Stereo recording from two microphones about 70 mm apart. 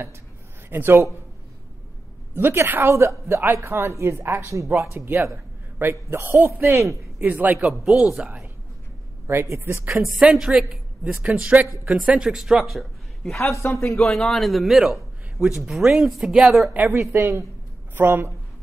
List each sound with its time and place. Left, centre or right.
0.7 s a man's voice: right
2.3 s a man's voice: right
7.2 s a man's voice: right
7.5 s speech: centre
9.3 s a man's voice: right
10.3 s a man's voice: centre
11.2 s a man's voice: centre
11.7 s speech: centre
13.6 s speech: left
13.9 s a man's voice: centre
17.1 s a man's voice: right